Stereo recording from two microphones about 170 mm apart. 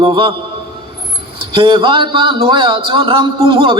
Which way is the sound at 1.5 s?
30° right (ahead or behind).